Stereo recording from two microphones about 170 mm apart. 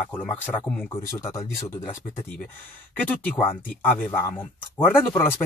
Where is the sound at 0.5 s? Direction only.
10° left (ahead or behind).